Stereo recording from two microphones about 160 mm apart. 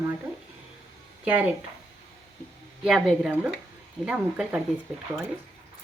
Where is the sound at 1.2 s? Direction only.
10° right (ahead or behind).